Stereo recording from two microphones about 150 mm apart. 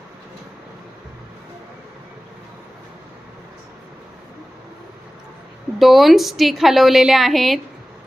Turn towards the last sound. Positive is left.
turn(degrees=0)  # may be behind; listen again after turning